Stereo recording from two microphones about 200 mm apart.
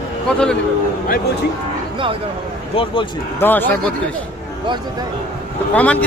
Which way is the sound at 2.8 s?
30° left (ahead or behind).